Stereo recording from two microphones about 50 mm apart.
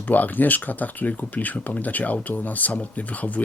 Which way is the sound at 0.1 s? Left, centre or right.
Left.